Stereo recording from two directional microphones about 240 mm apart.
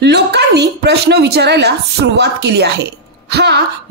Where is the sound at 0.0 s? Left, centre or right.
Right.